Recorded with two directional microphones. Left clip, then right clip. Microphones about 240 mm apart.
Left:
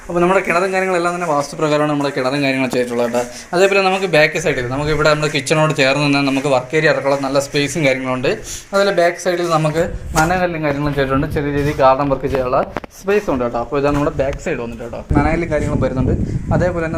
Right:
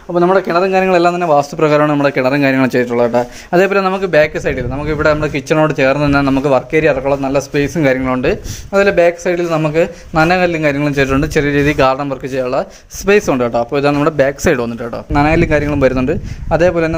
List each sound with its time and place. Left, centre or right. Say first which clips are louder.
0.2 s speech: right 3 dB; right